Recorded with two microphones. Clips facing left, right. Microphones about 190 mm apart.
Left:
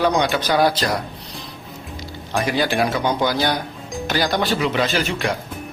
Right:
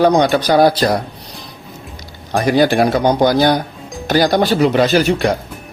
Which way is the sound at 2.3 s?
40° right (ahead or behind).